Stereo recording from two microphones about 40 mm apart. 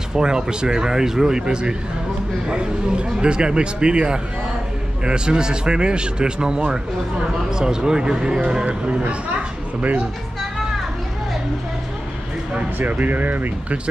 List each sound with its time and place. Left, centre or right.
0.1 s speech: centre
9.8 s speech: right
12.7 s speech: right